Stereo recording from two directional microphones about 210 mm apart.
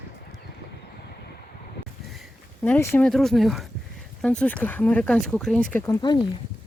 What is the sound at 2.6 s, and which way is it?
Speech, 10° left (ahead or behind).